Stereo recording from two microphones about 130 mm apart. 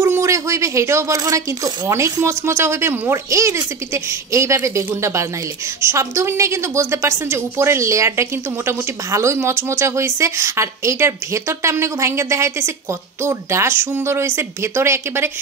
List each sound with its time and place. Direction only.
0.0 s a woman's voice: 20° right (ahead or behind)